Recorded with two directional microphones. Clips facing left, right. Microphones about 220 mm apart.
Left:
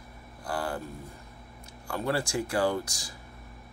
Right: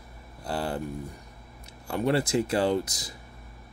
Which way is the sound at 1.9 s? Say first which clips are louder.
Right 5 dB; 20° right (ahead or behind).